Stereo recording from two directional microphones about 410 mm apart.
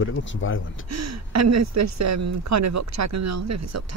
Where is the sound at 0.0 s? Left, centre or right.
Left.